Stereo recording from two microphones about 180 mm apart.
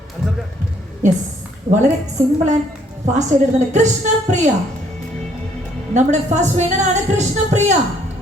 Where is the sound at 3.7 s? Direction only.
40° right (ahead or behind).